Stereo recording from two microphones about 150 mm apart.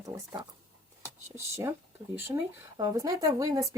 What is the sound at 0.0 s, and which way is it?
Speech, 25° right (ahead or behind).